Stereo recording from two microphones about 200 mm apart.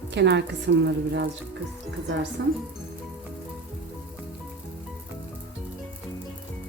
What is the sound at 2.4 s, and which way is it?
Speech, 60° right (ahead or behind).